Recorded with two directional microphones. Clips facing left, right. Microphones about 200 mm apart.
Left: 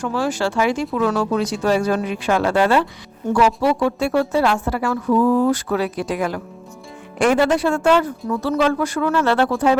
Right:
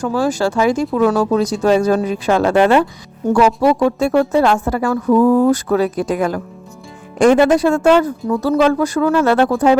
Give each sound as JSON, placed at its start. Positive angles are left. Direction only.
{"t": 0.0, "sound": "speech", "side_deg": -40}
{"t": 2.6, "sound": "speech", "side_deg": -20}
{"t": 3.3, "sound": "a woman's voice", "side_deg": -45}
{"t": 7.5, "sound": "speech", "side_deg": -40}